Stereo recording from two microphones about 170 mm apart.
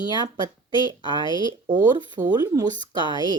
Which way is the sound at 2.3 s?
25° right (ahead or behind).